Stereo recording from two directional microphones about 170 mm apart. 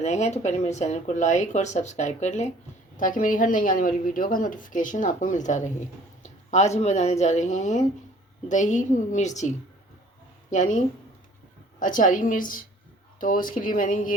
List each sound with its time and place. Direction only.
0.0 s a woman's voice: 40° left (ahead or behind)
10.5 s a woman's voice: 45° left (ahead or behind)
11.8 s a woman's voice: 50° left (ahead or behind)